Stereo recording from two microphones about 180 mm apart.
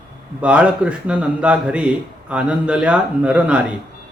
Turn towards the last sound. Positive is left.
turn(degrees=-5)  # may be behind; listen again after turning